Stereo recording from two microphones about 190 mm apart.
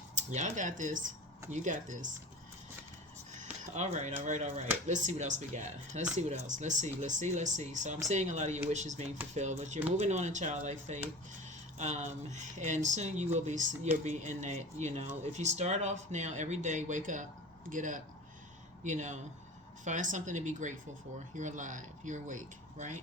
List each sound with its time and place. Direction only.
0.2 s speech: 40° right (ahead or behind)
3.3 s speech: 35° right (ahead or behind)